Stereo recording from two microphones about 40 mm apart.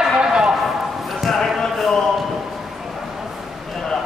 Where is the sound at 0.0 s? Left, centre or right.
Centre.